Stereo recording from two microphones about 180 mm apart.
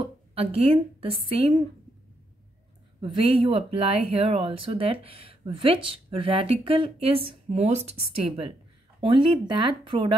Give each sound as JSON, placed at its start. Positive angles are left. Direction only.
{"t": 0.0, "sound": "speech", "side_deg": -35}
{"t": 3.0, "sound": "speech", "side_deg": -30}